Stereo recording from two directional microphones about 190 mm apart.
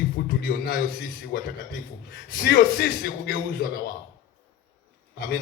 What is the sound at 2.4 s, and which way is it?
Speech, 55° left (ahead or behind).